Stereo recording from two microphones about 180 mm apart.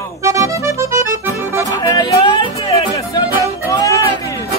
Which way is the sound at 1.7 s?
20° left (ahead or behind).